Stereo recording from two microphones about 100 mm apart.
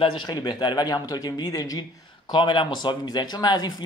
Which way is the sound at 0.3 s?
45° left (ahead or behind).